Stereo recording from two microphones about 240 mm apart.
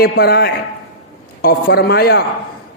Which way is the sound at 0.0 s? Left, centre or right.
Left.